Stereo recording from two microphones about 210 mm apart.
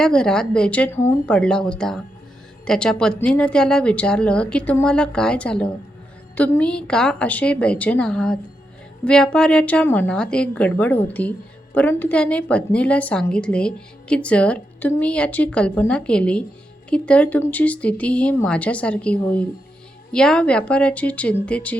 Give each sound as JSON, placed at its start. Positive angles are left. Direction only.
{"t": 0.0, "sound": "a woman's voice", "side_deg": 5}